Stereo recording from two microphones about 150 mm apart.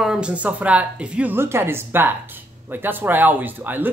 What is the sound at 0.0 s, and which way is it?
A woman's voice, 5° right (ahead or behind).